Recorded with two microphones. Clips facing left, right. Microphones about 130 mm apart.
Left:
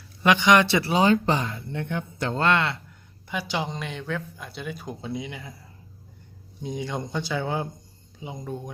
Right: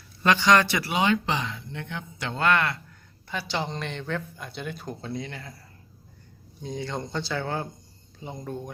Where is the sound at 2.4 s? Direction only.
25° left (ahead or behind).